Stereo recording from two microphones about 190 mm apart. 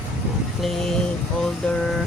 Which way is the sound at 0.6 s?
Centre (ahead or behind).